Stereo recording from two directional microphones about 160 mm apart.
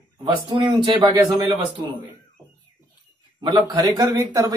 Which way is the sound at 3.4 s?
30° right (ahead or behind).